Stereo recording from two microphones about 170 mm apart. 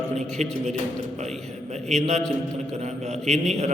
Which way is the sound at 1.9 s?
40° right (ahead or behind).